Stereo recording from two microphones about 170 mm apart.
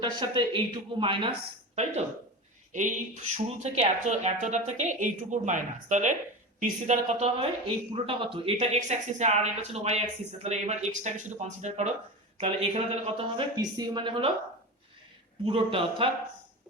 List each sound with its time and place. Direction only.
0.0 s a woman's voice: 25° right (ahead or behind)
13.6 s speech: 25° right (ahead or behind)
15.4 s speech: 30° right (ahead or behind)